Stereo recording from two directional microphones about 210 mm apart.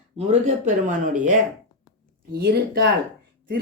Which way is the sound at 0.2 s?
35° right (ahead or behind).